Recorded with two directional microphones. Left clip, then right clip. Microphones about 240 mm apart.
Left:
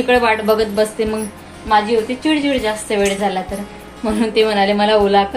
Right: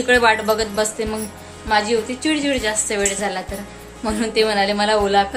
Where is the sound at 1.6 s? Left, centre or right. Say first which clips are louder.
Left 4 dB; centre.